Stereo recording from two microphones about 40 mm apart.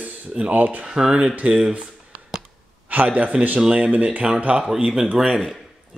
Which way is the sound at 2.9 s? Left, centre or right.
Right.